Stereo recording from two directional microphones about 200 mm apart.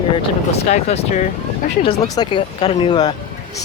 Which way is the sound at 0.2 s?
30° left (ahead or behind).